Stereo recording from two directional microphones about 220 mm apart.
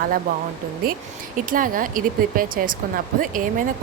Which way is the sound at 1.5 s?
40° right (ahead or behind).